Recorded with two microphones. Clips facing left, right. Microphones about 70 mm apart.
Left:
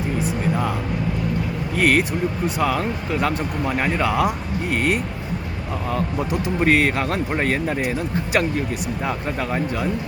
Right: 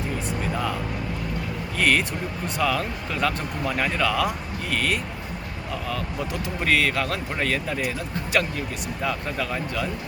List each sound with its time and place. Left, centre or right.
0.2 s music: centre
1.8 s speech: left